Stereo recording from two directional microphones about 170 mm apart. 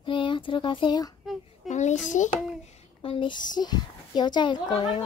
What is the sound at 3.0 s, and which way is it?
A child's voice, 30° left (ahead or behind).